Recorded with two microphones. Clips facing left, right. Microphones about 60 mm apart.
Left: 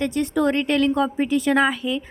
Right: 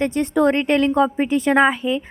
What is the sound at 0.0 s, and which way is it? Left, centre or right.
A woman's voice, right.